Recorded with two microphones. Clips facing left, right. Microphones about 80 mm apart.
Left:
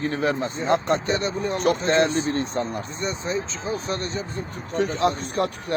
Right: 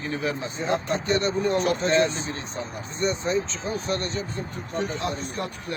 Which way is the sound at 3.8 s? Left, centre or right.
Left.